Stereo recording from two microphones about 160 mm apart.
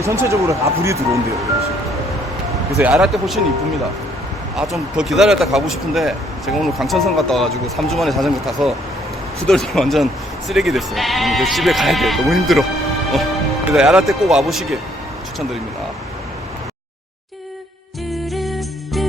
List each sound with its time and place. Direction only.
0.0 s speech: 20° right (ahead or behind)
2.9 s speech: centre (ahead or behind)
4.5 s speech: centre (ahead or behind)
13.7 s speech: 5° right (ahead or behind)